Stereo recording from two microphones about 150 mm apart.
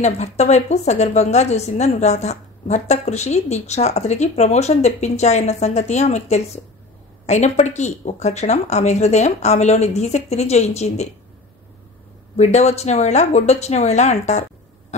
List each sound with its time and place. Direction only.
0.0 s a woman's voice: 50° left (ahead or behind)
12.4 s a woman's voice: 50° left (ahead or behind)